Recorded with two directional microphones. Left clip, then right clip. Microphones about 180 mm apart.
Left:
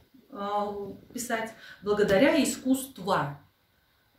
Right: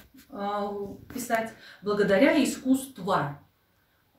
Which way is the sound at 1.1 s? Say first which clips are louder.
Right 4 dB; centre (ahead or behind).